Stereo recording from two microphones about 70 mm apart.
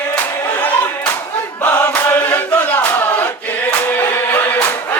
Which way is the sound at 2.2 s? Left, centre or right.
Left.